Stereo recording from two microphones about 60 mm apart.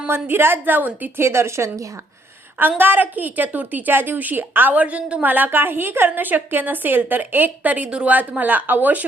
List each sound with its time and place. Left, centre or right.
0.1 s a woman's voice: right
1.1 s speech: right
2.6 s a woman's voice: right
5.3 s a woman's voice: right